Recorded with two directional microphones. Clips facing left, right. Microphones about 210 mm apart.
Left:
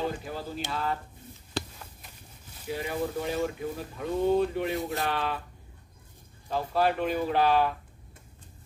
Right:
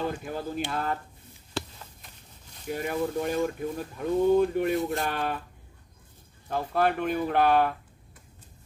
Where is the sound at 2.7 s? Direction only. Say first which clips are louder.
Right 2 dB; 50° right (ahead or behind).